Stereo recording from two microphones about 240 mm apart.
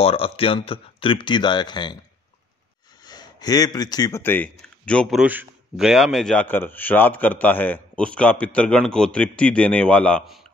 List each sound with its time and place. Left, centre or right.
0.0 s speech: left
3.1 s speech: centre